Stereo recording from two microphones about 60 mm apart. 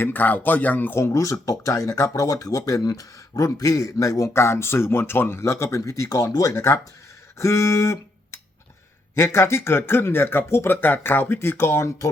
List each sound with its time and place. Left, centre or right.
0.0 s speech: left
0.9 s speech: left
4.4 s speech: left
6.5 s speech: left
7.3 s a sound: left
9.1 s speech: left